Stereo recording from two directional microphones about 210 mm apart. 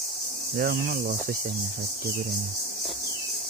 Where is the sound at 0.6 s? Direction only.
45° right (ahead or behind).